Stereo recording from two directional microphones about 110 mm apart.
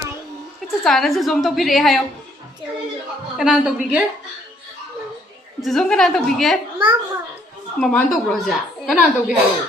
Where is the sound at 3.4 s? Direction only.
5° right (ahead or behind).